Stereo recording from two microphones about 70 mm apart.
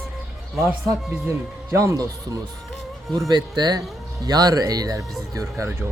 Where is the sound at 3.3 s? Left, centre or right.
Right.